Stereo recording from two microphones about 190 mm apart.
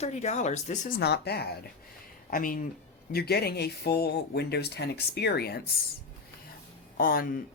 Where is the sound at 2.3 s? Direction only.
45° left (ahead or behind).